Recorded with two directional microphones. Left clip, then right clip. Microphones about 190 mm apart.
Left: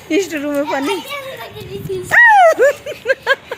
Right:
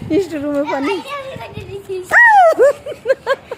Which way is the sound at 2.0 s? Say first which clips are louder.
Even; 15° right (ahead or behind).